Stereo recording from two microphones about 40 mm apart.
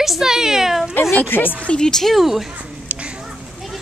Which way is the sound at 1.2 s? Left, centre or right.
Left.